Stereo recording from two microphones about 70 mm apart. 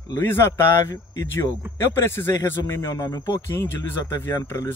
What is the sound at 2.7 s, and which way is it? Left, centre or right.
Speech, left.